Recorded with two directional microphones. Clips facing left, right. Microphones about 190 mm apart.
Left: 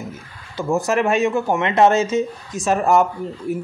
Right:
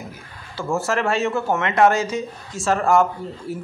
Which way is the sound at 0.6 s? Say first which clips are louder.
Left 3 dB; 15° left (ahead or behind).